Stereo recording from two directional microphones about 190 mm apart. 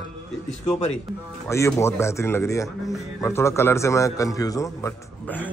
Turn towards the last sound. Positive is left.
turn(degrees=10)  # may be behind; listen again after turning